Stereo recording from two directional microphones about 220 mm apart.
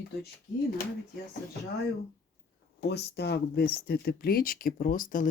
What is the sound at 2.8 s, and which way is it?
Speech, 50° left (ahead or behind).